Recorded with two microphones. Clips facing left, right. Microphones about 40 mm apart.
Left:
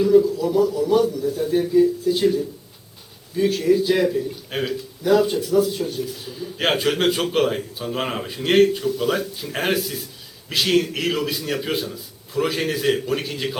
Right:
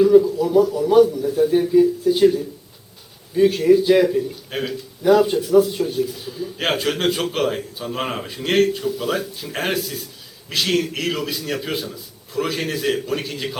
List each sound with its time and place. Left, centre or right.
0.0 s a sound: centre
0.7 s a man's voice: centre
4.4 s a man's voice: centre
5.0 s a man's voice: centre